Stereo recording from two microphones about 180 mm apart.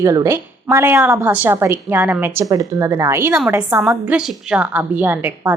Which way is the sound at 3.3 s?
5° right (ahead or behind).